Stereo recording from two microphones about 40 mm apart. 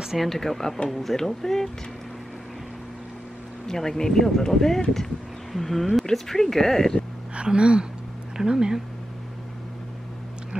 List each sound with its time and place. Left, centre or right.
0.2 s speech: centre
3.6 s speech: centre
7.4 s speech: right